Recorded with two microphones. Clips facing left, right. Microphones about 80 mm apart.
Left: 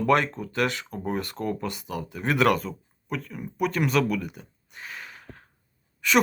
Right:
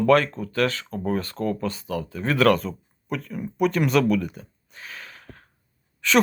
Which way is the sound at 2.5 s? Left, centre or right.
Centre.